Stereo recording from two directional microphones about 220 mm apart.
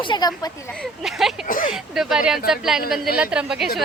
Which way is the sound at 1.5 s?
40° left (ahead or behind).